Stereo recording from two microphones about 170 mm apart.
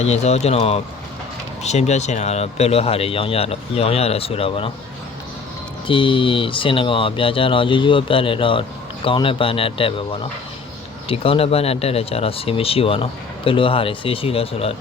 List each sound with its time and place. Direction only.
0.0 s speech: 40° left (ahead or behind)
5.9 s speech: 30° left (ahead or behind)